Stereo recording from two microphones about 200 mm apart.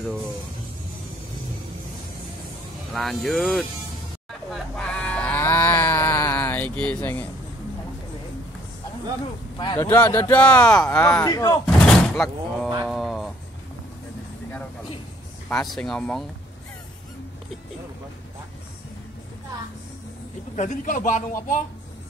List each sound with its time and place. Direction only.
2.9 s speech: centre (ahead or behind)
4.3 s livestock: centre (ahead or behind)
9.6 s speech: 20° left (ahead or behind)
9.8 s speech: 10° left (ahead or behind)
11.6 s a sound: centre (ahead or behind)
15.7 s speech: 5° left (ahead or behind)
20.5 s a man's voice: 40° left (ahead or behind)